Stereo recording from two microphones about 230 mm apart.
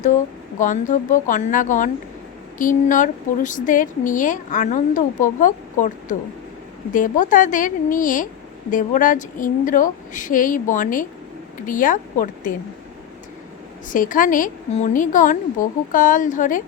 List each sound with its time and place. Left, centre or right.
0.6 s speech: left
13.9 s speech: left